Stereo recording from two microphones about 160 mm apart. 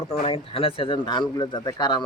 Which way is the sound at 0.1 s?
35° left (ahead or behind).